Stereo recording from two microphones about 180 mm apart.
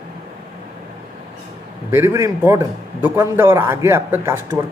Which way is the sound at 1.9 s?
15° right (ahead or behind).